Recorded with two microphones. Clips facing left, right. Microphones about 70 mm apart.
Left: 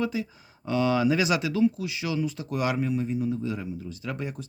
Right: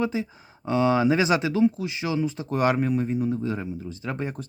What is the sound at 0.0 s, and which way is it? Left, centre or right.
Speech, right.